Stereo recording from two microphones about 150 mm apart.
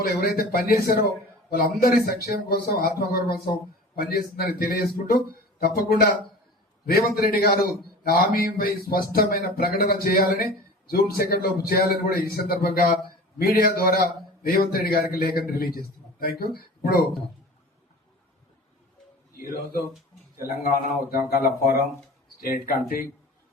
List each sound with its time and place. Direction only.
0.0 s a man's voice: 85° left
12.0 s a man's voice: 80° left
14.4 s a man's voice: 80° left
20.5 s a man's voice: 80° left